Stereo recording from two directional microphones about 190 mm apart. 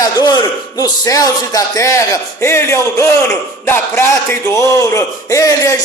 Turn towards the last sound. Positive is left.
turn(degrees=15)  # may be behind; listen again after turning